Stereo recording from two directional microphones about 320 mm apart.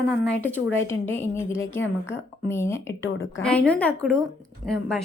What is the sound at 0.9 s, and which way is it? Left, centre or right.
A woman's voice, centre.